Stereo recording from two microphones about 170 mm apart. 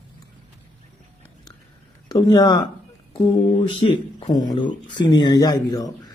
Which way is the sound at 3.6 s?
30° left (ahead or behind).